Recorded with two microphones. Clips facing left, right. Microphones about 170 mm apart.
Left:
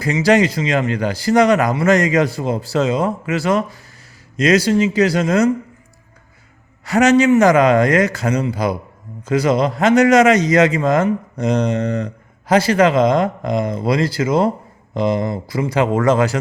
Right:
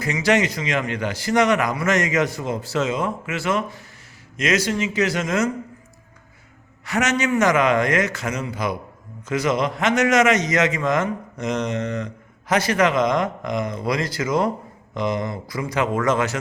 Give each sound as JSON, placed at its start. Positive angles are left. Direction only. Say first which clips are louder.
{"t": 0.0, "sound": "a man's voice", "louder": "left 5 dB", "side_deg": 35}
{"t": 6.8, "sound": "a man's voice", "louder": "left 9 dB", "side_deg": 35}